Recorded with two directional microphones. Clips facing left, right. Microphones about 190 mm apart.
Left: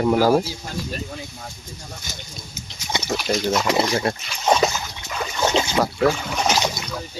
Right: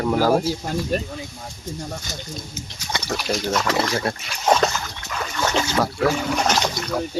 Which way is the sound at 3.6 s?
15° left (ahead or behind).